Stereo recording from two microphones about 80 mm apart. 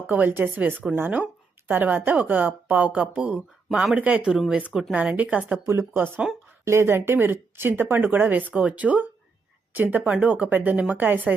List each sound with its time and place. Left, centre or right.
0.1 s a woman's voice: right
5.6 s a woman's voice: right